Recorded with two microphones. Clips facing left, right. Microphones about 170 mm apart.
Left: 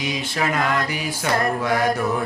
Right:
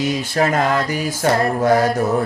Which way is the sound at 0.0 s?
45° right (ahead or behind).